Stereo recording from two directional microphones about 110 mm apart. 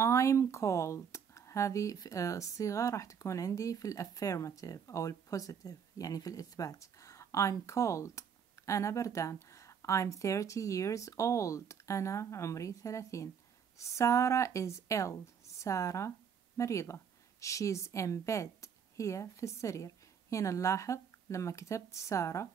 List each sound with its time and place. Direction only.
0.0 s speech: 25° left (ahead or behind)